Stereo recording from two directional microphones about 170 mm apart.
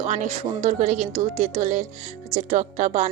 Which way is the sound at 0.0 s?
45° right (ahead or behind).